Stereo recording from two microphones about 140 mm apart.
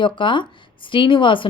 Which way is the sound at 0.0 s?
35° left (ahead or behind).